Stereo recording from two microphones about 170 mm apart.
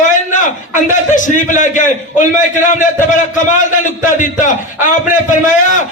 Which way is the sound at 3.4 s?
50° left (ahead or behind).